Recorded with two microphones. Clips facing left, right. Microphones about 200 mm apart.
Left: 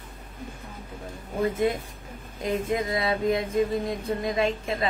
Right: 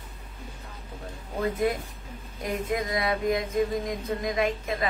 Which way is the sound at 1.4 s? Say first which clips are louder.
Left 2 dB; 25° left (ahead or behind).